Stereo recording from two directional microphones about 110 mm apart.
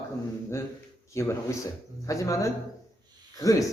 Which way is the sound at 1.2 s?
25° left (ahead or behind).